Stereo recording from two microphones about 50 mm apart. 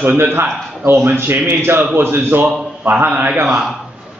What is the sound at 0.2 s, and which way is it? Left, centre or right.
A man's voice, right.